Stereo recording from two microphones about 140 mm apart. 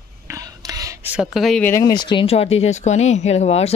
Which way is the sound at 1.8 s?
30° left (ahead or behind).